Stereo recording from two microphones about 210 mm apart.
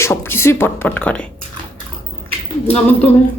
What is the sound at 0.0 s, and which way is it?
Speech, 10° left (ahead or behind).